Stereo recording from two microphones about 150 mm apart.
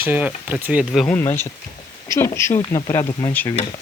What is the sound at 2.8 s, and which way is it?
Speech, 35° left (ahead or behind).